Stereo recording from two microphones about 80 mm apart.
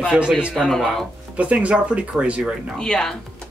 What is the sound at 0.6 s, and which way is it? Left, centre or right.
Speech, centre.